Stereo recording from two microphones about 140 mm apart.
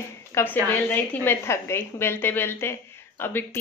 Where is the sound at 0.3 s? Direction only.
15° left (ahead or behind).